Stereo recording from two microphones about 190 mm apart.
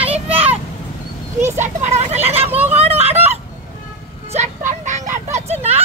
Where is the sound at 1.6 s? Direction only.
35° right (ahead or behind).